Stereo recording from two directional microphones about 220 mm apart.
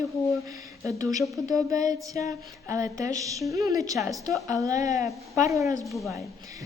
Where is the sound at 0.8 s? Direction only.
15° right (ahead or behind).